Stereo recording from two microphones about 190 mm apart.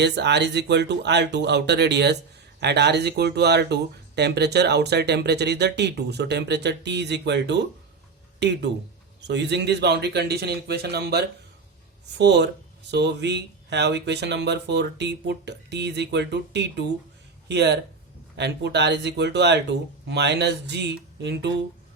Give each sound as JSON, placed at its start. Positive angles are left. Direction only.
{"t": 0.0, "sound": "speech", "side_deg": -65}